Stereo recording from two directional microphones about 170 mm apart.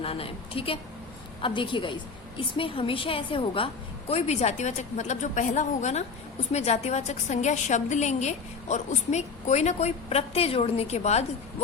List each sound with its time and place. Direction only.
0.0 s a woman's voice: 35° left (ahead or behind)